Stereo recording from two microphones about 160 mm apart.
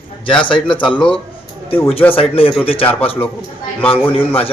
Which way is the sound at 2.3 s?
35° left (ahead or behind).